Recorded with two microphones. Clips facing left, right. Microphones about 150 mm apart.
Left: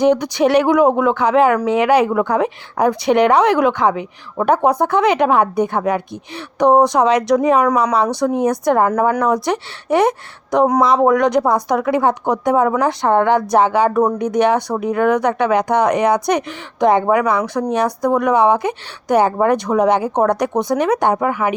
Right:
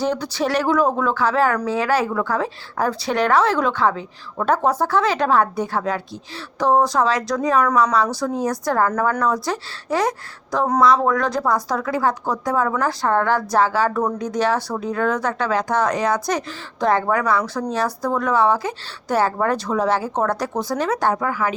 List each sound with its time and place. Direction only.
0.0 s a woman's voice: 15° left (ahead or behind)